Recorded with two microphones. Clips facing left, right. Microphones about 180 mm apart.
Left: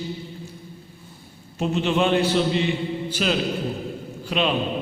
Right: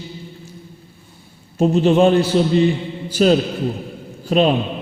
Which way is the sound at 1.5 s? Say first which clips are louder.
Right 8 dB; 40° right (ahead or behind).